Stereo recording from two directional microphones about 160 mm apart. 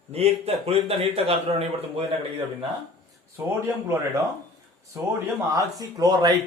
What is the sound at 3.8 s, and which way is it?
Speech, 15° right (ahead or behind).